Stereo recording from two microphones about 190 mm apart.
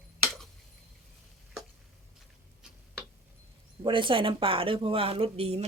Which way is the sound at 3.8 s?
25° right (ahead or behind).